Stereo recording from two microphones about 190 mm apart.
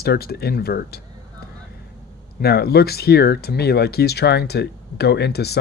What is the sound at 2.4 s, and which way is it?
Speech, 55° left (ahead or behind).